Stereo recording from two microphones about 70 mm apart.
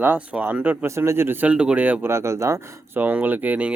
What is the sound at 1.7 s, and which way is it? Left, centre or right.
Speech, right.